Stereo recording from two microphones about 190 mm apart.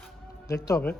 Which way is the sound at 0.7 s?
10° left (ahead or behind).